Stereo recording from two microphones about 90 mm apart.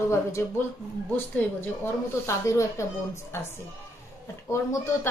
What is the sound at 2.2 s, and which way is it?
Speech, 30° left (ahead or behind).